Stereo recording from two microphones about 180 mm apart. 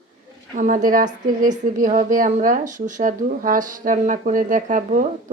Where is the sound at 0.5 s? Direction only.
45° right (ahead or behind).